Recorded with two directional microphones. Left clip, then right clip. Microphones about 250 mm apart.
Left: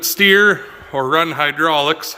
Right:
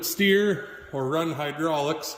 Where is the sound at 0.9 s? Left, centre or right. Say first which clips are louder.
Left 11 dB; left.